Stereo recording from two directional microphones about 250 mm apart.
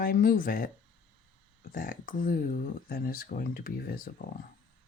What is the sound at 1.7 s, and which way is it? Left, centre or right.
Speech, left.